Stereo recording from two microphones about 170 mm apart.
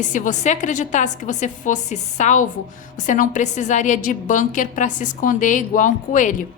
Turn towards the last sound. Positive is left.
turn(degrees=50)  # may be behind; listen again after turning